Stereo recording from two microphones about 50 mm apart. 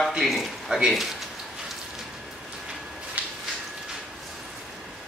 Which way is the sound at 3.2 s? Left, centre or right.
Right.